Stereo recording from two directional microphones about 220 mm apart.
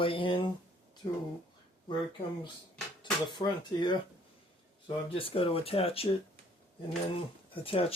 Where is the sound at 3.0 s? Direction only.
20° left (ahead or behind).